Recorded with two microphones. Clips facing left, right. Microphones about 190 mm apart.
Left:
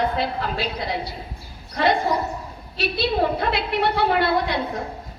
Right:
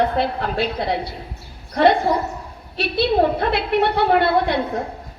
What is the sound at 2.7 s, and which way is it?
A woman's voice, 60° right (ahead or behind).